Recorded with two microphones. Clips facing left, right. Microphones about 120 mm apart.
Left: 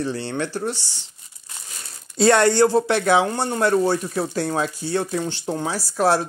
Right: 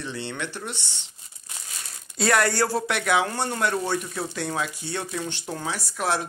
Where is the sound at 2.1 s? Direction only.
30° left (ahead or behind).